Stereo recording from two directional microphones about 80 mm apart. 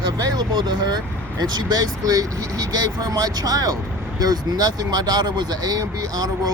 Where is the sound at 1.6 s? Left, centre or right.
Right.